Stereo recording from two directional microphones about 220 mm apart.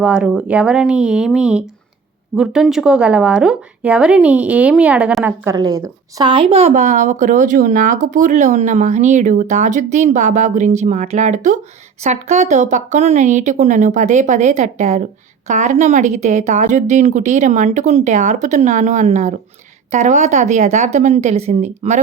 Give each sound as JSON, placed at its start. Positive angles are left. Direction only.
{"t": 0.0, "sound": "a woman's voice", "side_deg": -5}